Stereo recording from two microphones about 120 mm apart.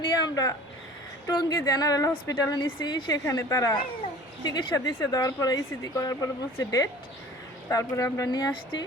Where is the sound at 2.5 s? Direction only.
40° left (ahead or behind).